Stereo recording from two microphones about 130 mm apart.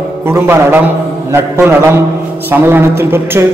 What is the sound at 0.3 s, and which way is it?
A man's voice, 15° right (ahead or behind).